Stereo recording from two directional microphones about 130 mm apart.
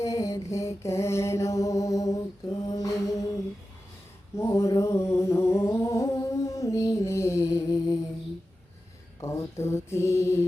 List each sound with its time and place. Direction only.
0.0 s mantra: 25° left (ahead or behind)
4.4 s humming: 25° left (ahead or behind)
9.2 s mantra: 25° left (ahead or behind)